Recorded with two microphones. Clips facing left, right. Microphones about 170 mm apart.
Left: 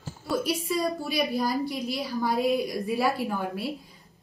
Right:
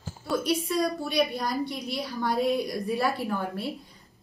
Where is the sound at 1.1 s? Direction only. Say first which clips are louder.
Even; 5° left (ahead or behind).